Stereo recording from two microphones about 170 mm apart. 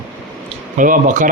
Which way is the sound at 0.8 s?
50° right (ahead or behind).